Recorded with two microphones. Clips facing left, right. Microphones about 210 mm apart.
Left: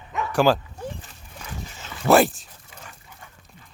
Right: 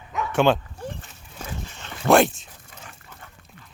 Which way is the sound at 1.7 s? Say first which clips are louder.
Even; 5° left (ahead or behind).